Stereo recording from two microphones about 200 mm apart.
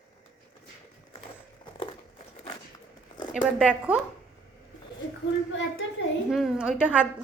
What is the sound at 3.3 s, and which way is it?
Speech, 5° right (ahead or behind).